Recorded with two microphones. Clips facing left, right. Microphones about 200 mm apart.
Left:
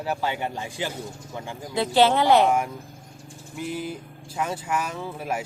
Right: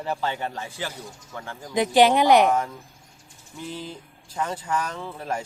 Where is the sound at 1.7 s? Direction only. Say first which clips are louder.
Right 2 dB; 15° right (ahead or behind).